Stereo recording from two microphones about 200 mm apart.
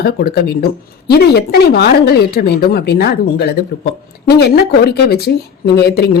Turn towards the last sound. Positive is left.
turn(degrees=50)  # may be behind; listen again after turning